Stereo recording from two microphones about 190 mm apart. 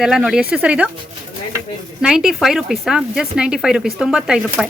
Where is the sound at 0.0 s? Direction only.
Centre (ahead or behind).